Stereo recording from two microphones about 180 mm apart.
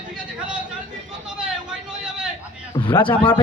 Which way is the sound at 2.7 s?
25° left (ahead or behind).